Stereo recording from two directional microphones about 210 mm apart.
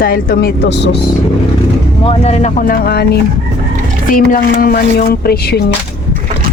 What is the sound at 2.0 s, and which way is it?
Speech, 30° left (ahead or behind).